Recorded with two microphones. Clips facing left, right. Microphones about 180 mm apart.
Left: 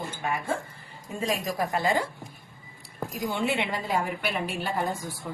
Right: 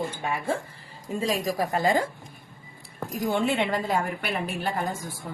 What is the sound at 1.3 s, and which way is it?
Speech, 35° right (ahead or behind).